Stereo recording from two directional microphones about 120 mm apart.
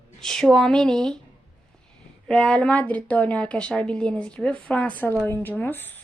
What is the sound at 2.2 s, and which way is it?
A woman's voice, 5° left (ahead or behind).